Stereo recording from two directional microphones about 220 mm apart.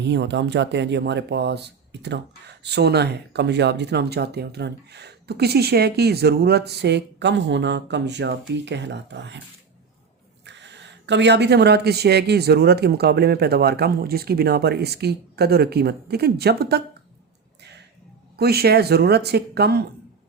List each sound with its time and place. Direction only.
0.0 s speech: 50° right (ahead or behind)
10.4 s speech: 55° right (ahead or behind)
17.6 s a sound: 50° right (ahead or behind)
18.3 s speech: 45° right (ahead or behind)